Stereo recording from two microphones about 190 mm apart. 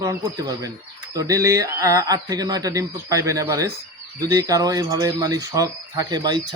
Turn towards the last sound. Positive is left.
turn(degrees=-20)  # may be behind; listen again after turning